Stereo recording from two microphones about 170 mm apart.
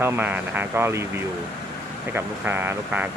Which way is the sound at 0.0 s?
10° right (ahead or behind).